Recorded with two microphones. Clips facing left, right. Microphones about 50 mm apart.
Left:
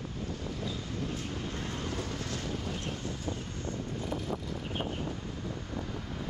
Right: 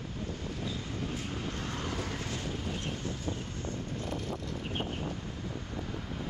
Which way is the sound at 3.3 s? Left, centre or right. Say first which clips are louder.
Even; centre.